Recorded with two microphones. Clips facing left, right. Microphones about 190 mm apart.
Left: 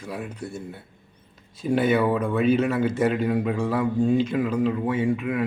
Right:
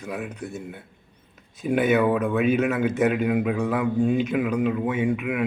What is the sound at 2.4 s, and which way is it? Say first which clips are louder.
Speech: left 3 dB; 15° right (ahead or behind).